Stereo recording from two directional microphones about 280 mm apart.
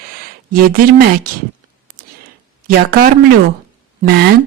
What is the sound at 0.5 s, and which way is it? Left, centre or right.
Speech, right.